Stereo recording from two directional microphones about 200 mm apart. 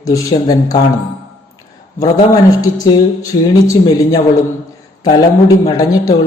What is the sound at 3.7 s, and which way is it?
Music, 20° left (ahead or behind).